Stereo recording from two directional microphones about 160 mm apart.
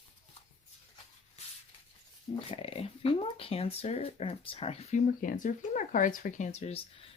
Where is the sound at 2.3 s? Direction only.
35° left (ahead or behind).